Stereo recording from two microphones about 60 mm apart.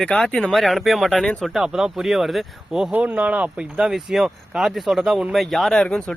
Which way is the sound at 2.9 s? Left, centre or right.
Right.